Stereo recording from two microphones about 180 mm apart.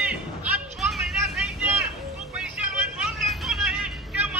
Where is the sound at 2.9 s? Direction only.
Centre (ahead or behind).